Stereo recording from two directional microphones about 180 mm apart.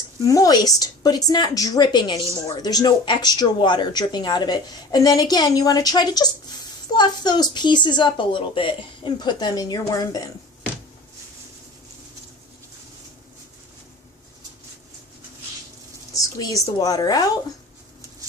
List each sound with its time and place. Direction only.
0.3 s a woman's voice: 20° left (ahead or behind)
16.1 s a woman's voice: 20° left (ahead or behind)